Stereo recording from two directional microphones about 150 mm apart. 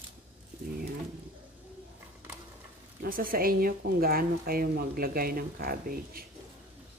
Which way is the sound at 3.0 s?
70° right (ahead or behind).